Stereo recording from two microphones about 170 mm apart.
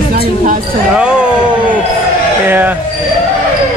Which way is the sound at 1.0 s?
5° right (ahead or behind).